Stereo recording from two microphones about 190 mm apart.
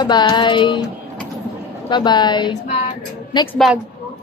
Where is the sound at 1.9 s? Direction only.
25° left (ahead or behind).